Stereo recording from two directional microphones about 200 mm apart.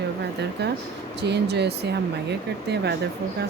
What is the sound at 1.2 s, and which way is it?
Speech, 55° right (ahead or behind).